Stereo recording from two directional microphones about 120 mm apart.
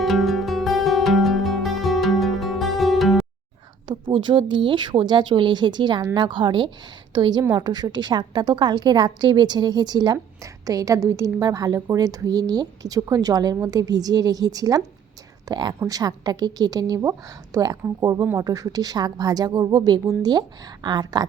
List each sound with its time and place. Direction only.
0.0 s music: centre (ahead or behind)
3.8 s a woman's voice: 45° right (ahead or behind)